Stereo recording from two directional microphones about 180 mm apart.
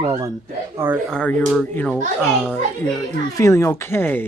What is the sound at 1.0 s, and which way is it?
Speech, 5° left (ahead or behind).